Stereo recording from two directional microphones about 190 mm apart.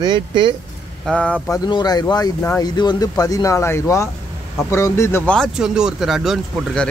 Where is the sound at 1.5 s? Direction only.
20° left (ahead or behind).